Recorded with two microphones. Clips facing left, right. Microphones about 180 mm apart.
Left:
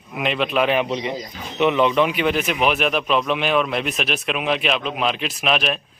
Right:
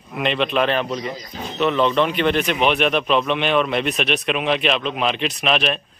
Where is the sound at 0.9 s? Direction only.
25° left (ahead or behind).